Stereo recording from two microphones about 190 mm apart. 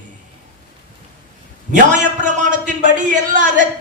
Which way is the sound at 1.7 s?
40° right (ahead or behind).